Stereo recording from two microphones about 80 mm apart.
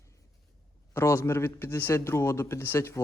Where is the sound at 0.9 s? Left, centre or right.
Left.